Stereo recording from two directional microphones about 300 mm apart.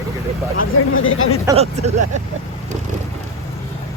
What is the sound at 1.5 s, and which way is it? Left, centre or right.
Speech, right.